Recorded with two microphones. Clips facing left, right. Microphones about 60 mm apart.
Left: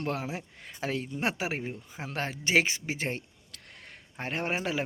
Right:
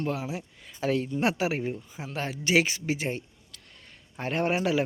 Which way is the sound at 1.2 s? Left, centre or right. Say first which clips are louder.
Right 5 dB; left.